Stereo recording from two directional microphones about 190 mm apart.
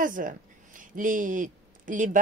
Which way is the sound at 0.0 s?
45° right (ahead or behind).